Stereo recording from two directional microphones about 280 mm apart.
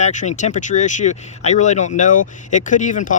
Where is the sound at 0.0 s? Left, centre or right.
Left.